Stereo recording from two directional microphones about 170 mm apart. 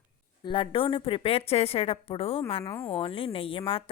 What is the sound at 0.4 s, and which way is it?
Speech, 30° left (ahead or behind).